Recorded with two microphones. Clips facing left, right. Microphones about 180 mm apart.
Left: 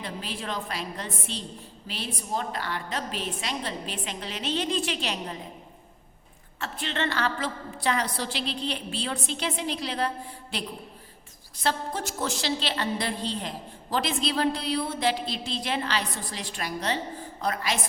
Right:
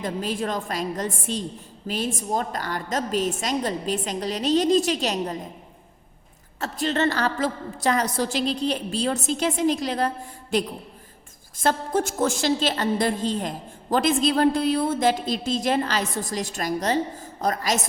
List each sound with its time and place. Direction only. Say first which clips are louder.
0.0 s a woman's voice: right 8 dB; 45° right (ahead or behind)
6.6 s a woman's voice: right 7 dB; 40° right (ahead or behind)